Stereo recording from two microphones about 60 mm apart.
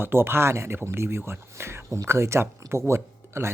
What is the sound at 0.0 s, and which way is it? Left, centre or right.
Speech, right.